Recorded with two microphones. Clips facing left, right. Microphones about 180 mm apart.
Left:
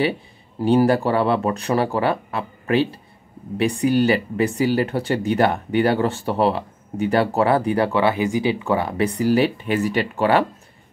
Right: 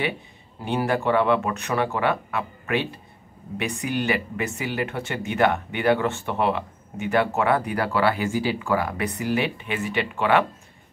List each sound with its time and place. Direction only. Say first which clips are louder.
0.7 s speech: left 6 dB; 35° left (ahead or behind)